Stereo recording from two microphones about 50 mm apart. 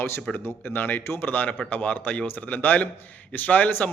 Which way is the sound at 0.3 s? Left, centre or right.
Left.